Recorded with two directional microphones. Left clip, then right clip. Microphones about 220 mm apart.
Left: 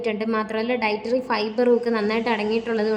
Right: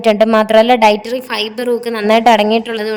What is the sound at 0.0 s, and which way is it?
A woman's voice, 45° right (ahead or behind).